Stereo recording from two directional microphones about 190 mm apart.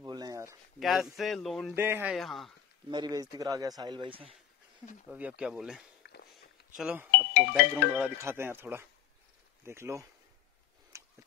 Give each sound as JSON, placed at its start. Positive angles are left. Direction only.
{"t": 0.0, "sound": "a sound", "side_deg": -20}
{"t": 0.7, "sound": "speech", "side_deg": 0}
{"t": 1.8, "sound": "speech", "side_deg": -10}
{"t": 2.1, "sound": "speech", "side_deg": 0}
{"t": 2.9, "sound": "speech", "side_deg": -20}
{"t": 5.1, "sound": "speech", "side_deg": -5}
{"t": 10.9, "sound": "a sound", "side_deg": -15}